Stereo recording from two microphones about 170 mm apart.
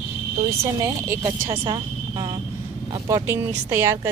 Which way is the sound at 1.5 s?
30° right (ahead or behind).